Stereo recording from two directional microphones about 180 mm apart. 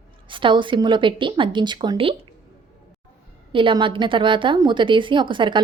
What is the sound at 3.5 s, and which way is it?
A woman's voice, 30° right (ahead or behind).